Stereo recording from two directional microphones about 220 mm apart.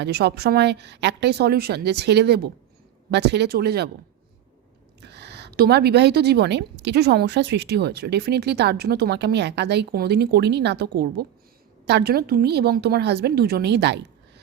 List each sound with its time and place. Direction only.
0.0 s a woman's voice: 50° right (ahead or behind)
5.0 s a woman's voice: 50° right (ahead or behind)